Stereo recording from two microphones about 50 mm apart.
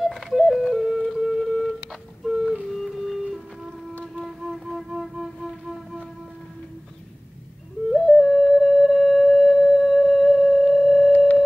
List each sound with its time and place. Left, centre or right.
0.0 s music: centre
1.2 s a sound: centre
2.7 s music: centre
4.2 s music: centre
7.9 s flute: centre
11.1 s sine wave: left